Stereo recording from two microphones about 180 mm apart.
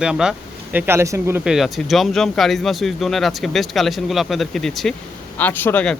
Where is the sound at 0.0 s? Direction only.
5° right (ahead or behind).